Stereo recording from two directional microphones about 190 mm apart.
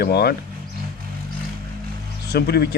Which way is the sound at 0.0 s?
55° left (ahead or behind).